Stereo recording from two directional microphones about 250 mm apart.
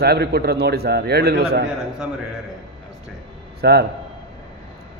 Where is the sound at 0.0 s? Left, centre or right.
Right.